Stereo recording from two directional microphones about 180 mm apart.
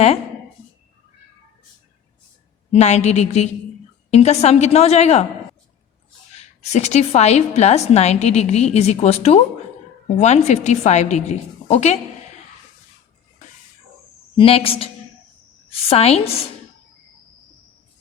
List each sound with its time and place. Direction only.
2.7 s a woman's voice: 40° left (ahead or behind)
6.6 s a woman's voice: 40° left (ahead or behind)
14.3 s a woman's voice: 30° left (ahead or behind)